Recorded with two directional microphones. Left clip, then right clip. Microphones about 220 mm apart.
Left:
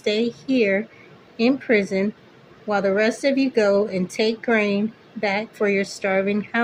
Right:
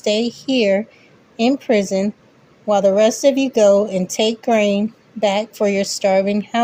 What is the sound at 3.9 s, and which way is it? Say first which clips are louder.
A woman's voice: right 4 dB; 30° right (ahead or behind).